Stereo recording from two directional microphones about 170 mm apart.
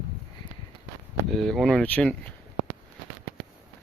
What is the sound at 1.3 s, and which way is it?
Speech, centre (ahead or behind).